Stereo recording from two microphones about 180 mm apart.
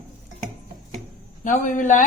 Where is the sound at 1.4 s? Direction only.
45° left (ahead or behind).